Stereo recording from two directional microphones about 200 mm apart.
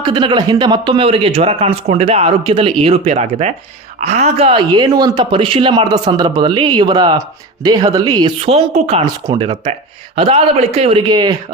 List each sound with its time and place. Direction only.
0.0 s speech: 25° right (ahead or behind)